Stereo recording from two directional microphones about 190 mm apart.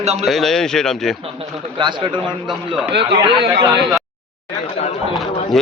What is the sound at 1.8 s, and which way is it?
Speech, 25° right (ahead or behind).